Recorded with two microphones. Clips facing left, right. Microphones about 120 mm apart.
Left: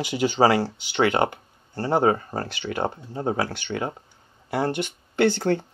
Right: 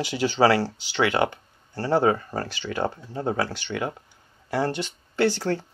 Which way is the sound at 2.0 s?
35° left (ahead or behind).